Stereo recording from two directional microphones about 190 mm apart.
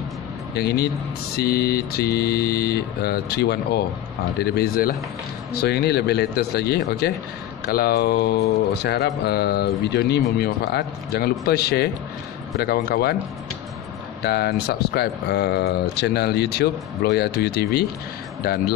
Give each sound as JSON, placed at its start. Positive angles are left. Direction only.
{"t": 0.6, "sound": "speech", "side_deg": 60}
{"t": 14.2, "sound": "speech", "side_deg": 55}